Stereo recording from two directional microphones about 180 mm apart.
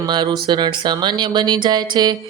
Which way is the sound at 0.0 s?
25° right (ahead or behind).